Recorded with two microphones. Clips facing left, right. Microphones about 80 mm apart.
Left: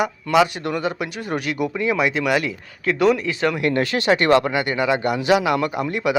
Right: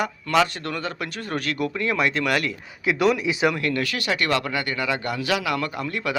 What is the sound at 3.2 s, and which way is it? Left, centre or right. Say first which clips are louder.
Speech: even; centre.